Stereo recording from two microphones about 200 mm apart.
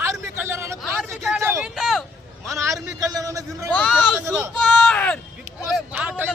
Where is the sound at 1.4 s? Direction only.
15° right (ahead or behind).